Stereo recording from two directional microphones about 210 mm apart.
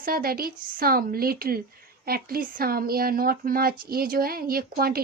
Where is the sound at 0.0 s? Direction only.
45° right (ahead or behind).